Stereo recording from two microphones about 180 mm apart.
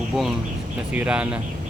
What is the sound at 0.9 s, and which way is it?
Speech, 5° right (ahead or behind).